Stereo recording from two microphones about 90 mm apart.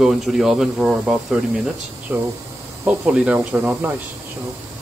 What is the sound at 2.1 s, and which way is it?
Speech, 20° right (ahead or behind).